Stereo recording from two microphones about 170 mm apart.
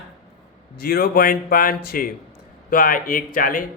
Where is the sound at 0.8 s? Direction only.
60° left (ahead or behind).